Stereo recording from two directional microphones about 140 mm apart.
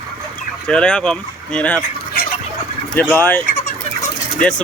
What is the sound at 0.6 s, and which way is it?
Speech, 5° left (ahead or behind).